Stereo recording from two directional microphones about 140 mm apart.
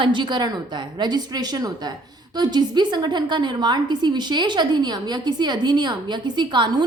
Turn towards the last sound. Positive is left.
turn(degrees=-35)  # may be behind; listen again after turning